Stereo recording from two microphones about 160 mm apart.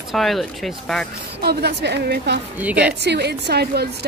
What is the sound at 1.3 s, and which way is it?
A woman's voice, 90° right.